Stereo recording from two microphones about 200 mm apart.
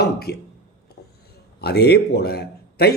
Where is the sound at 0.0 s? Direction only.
50° left (ahead or behind).